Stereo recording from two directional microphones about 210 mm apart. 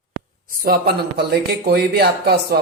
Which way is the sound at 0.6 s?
45° right (ahead or behind).